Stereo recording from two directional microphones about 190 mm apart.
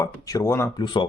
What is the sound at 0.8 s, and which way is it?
Speech, 25° left (ahead or behind).